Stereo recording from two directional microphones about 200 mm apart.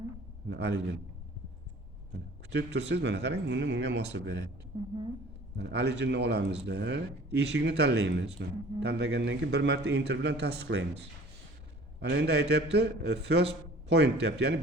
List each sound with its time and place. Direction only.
0.4 s a man's voice: 60° right (ahead or behind)
2.5 s a man's voice: 60° right (ahead or behind)
4.7 s a woman's voice: 25° right (ahead or behind)
5.5 s a man's voice: 60° right (ahead or behind)